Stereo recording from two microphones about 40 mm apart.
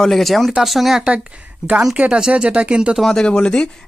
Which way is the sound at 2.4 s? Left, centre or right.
Right.